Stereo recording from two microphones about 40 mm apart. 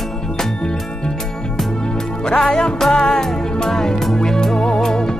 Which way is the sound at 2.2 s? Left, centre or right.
Centre.